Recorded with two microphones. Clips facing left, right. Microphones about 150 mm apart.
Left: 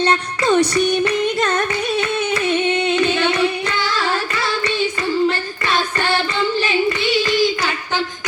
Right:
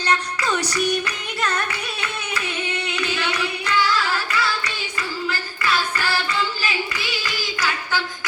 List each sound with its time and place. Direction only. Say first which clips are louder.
0.0 s music: left 5 dB; 30° left (ahead or behind)
2.6 s singing: left 10 dB; 30° left (ahead or behind)
7.3 s a sound: left 9 dB; 20° left (ahead or behind)